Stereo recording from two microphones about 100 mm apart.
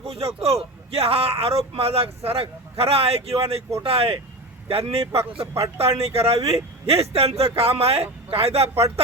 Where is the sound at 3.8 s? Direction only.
75° right (ahead or behind).